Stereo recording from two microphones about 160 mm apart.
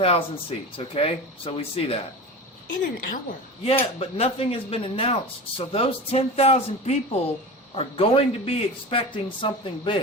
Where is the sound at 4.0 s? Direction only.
40° left (ahead or behind).